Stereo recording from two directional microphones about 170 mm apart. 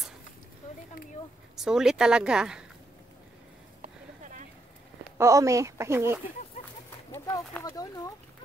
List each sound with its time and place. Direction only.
1.6 s speech: 5° right (ahead or behind)
3.8 s a sound: 45° right (ahead or behind)
5.1 s speech: 15° right (ahead or behind)
7.1 s speech: 20° left (ahead or behind)